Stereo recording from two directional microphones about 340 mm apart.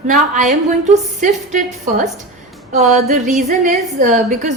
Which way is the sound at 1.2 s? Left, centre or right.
Right.